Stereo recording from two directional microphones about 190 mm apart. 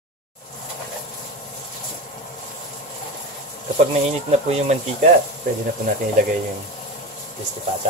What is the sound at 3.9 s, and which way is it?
Speech, 35° right (ahead or behind).